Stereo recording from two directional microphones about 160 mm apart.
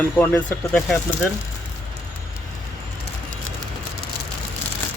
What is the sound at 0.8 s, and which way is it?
Speech, centre (ahead or behind).